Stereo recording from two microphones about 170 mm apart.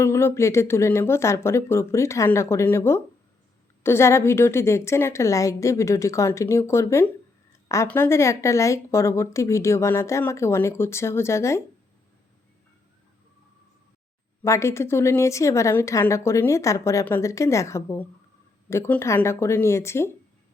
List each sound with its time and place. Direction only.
0.0 s a woman's voice: 15° left (ahead or behind)
14.4 s a woman's voice: 15° left (ahead or behind)